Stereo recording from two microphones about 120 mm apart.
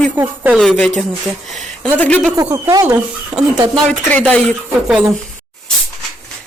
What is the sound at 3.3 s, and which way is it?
Speech, 45° right (ahead or behind).